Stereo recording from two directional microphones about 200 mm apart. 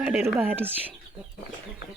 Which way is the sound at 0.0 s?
5° right (ahead or behind).